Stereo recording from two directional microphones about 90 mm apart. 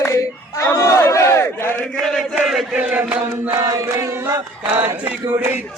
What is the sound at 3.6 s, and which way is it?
Chant, 35° right (ahead or behind).